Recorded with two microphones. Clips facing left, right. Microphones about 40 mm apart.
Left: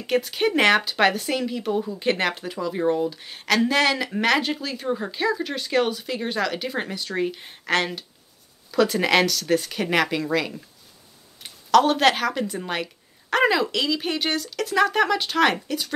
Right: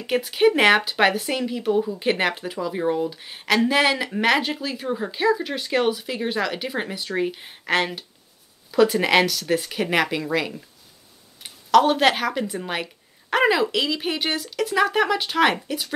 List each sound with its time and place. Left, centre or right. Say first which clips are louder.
0.0 s speech: right 3 dB; centre